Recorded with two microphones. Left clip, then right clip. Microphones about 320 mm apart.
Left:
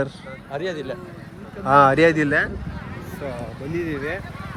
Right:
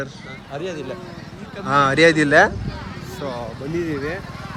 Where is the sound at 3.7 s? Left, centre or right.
Centre.